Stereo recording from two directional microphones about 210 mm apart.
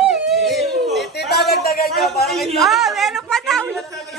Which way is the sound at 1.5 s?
45° left (ahead or behind).